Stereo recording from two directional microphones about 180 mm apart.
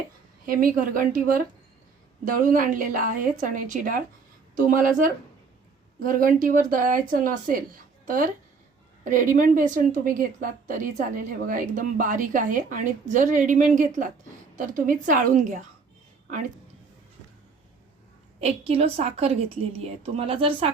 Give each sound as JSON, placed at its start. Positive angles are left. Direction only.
{"t": 0.4, "sound": "a woman's voice", "side_deg": -55}
{"t": 18.3, "sound": "a woman's voice", "side_deg": -35}